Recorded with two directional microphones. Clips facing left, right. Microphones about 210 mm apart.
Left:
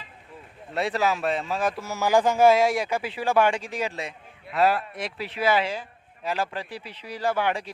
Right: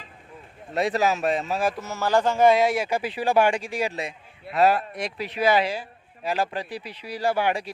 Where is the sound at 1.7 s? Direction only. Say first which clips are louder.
Left 1 dB; 10° left (ahead or behind).